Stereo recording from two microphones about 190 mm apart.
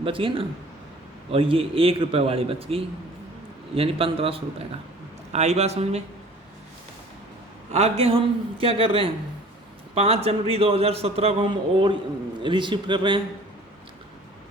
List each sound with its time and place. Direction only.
0.0 s a man's voice: 25° right (ahead or behind)
7.7 s a man's voice: 35° right (ahead or behind)